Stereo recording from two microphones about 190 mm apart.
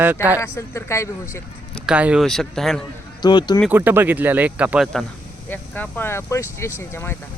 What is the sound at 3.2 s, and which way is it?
Speech, 25° left (ahead or behind).